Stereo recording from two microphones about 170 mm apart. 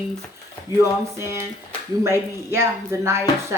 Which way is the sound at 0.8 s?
15° right (ahead or behind).